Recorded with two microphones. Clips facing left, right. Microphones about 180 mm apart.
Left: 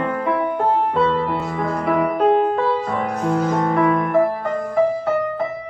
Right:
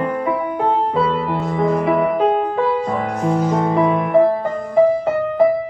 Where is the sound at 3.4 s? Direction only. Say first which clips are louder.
Right 1 dB; 15° right (ahead or behind).